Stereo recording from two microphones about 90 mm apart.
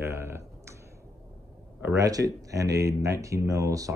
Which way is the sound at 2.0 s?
40° right (ahead or behind).